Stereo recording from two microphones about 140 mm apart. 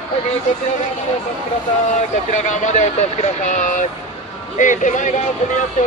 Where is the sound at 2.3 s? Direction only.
60° left (ahead or behind).